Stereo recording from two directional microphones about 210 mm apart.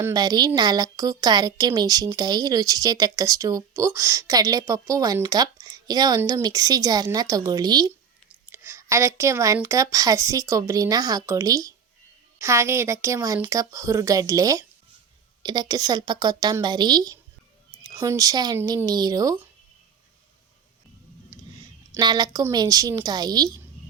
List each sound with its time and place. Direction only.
0.0 s a woman's voice: 20° right (ahead or behind)
21.3 s clicking: 15° right (ahead or behind)
21.9 s a woman's voice: 20° right (ahead or behind)